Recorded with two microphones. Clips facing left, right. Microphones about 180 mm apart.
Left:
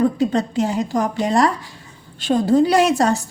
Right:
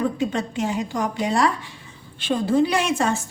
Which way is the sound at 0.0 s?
35° left (ahead or behind).